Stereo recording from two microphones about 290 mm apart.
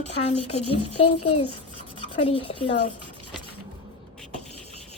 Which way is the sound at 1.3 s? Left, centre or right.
Left.